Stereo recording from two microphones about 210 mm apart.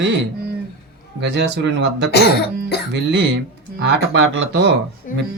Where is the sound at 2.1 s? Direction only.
50° left (ahead or behind).